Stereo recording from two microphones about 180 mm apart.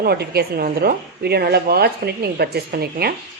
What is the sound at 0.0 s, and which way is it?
A woman's voice, 60° right (ahead or behind).